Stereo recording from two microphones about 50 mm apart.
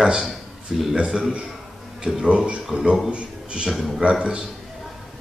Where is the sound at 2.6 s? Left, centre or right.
Centre.